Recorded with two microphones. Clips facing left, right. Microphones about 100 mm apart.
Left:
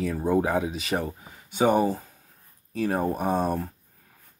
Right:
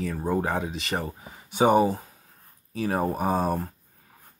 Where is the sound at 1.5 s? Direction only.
15° right (ahead or behind).